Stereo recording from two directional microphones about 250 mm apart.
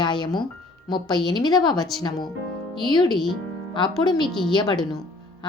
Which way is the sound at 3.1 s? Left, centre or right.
Centre.